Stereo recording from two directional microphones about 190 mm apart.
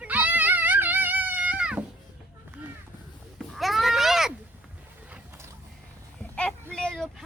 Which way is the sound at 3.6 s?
Centre (ahead or behind).